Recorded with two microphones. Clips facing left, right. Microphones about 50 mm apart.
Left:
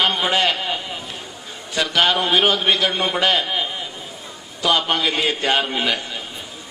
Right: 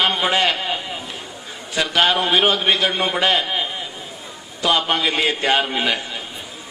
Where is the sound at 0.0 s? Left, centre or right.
Centre.